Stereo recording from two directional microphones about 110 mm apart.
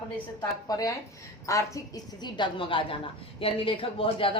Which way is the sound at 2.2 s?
45° left (ahead or behind).